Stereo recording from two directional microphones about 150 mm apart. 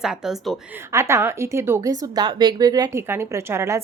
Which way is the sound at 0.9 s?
20° right (ahead or behind).